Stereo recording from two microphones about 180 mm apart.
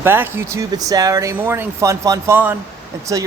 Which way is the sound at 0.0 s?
10° right (ahead or behind).